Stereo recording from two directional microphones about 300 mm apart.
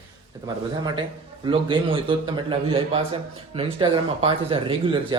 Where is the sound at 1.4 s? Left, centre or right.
Centre.